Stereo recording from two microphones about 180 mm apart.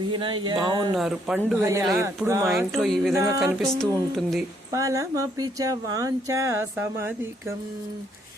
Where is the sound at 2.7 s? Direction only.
Centre (ahead or behind).